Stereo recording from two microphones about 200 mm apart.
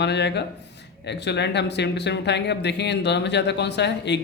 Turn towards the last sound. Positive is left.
turn(degrees=60)  # may be behind; listen again after turning